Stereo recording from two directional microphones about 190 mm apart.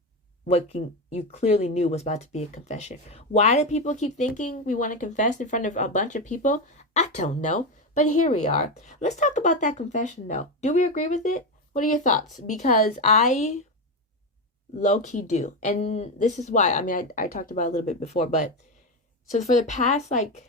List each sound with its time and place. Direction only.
0.4 s speech: 35° left (ahead or behind)
14.8 s speech: 40° left (ahead or behind)